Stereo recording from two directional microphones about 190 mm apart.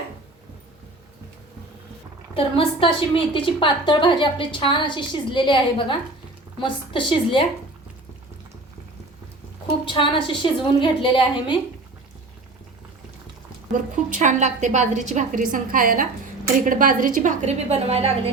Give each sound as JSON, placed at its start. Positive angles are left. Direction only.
{"t": 2.3, "sound": "a woman's voice", "side_deg": 30}
{"t": 9.8, "sound": "a woman's voice", "side_deg": 25}
{"t": 14.1, "sound": "a woman's voice", "side_deg": -40}